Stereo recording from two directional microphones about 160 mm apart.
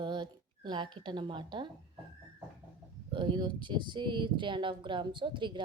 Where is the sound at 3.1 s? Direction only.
30° right (ahead or behind).